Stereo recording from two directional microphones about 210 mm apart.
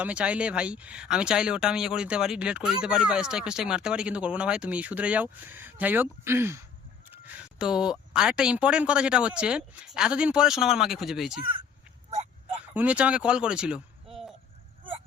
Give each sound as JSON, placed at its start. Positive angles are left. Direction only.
{"t": 0.0, "sound": "speech", "side_deg": -5}
{"t": 12.7, "sound": "speech", "side_deg": -5}